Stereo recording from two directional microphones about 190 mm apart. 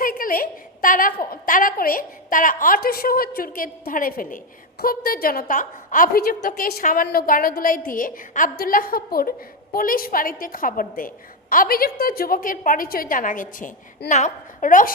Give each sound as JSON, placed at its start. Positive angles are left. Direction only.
{"t": 0.0, "sound": "a woman's voice", "side_deg": 50}